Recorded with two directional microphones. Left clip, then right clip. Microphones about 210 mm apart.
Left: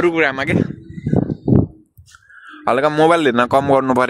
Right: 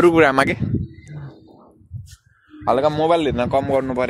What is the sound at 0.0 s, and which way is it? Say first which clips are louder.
Speech: right 2 dB; 25° right (ahead or behind).